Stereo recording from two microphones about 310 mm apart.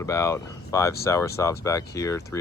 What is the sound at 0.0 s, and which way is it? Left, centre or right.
Speech, centre.